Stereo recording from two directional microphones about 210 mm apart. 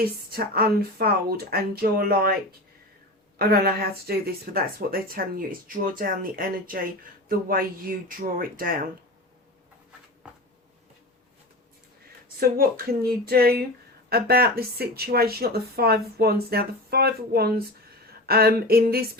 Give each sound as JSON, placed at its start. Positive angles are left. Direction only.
{"t": 0.3, "sound": "speech", "side_deg": -45}
{"t": 3.3, "sound": "speech", "side_deg": -50}
{"t": 12.4, "sound": "speech", "side_deg": -45}